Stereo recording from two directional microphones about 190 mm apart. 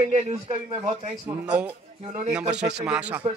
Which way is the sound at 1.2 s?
5° right (ahead or behind).